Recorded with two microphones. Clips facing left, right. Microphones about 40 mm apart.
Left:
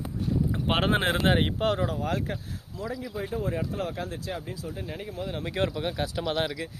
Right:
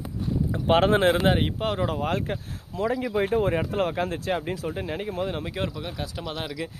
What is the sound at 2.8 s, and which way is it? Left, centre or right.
Speech, right.